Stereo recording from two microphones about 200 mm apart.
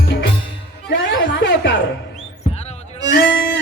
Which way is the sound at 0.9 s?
65° left (ahead or behind).